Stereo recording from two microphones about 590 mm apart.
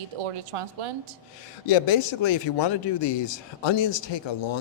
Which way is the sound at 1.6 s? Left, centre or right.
Left.